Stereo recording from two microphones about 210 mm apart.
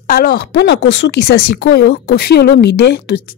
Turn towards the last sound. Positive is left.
turn(degrees=50)  # may be behind; listen again after turning